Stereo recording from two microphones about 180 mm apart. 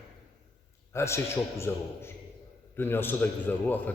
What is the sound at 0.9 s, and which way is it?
Speech, 15° left (ahead or behind).